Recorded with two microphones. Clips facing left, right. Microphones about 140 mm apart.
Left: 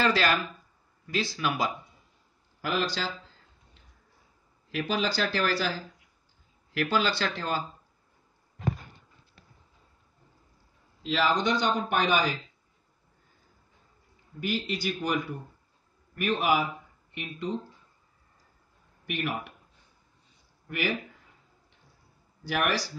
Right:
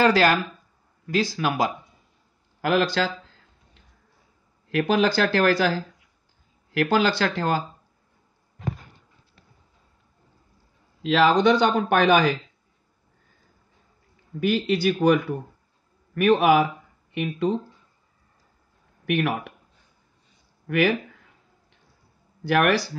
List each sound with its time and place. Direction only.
0.0 s speech: 45° right (ahead or behind)
2.6 s speech: 60° right (ahead or behind)
4.6 s speech: 60° right (ahead or behind)
11.0 s a man's voice: 75° right (ahead or behind)
14.5 s a man's voice: 65° right (ahead or behind)
16.2 s a man's voice: 80° right
19.0 s speech: 85° right
20.6 s speech: 90° right
22.4 s speech: 60° right (ahead or behind)